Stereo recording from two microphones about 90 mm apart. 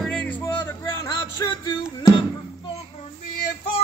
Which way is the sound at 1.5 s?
60° left (ahead or behind).